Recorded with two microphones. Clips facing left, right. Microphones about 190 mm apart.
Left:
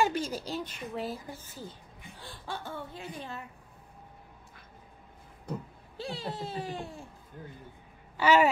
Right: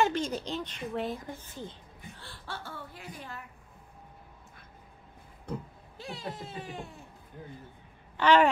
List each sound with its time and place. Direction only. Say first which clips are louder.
0.0 s a child's voice: right 1 dB; 5° left (ahead or behind); by 3.4 s 25° left (ahead or behind)
5.9 s speech: left 3 dB; 30° left (ahead or behind)
8.2 s a child's voice: right 1 dB; 10° left (ahead or behind)